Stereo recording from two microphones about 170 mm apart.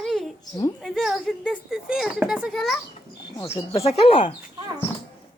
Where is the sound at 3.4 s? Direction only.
35° left (ahead or behind).